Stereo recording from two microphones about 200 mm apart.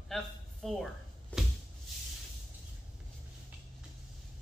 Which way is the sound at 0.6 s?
Centre (ahead or behind).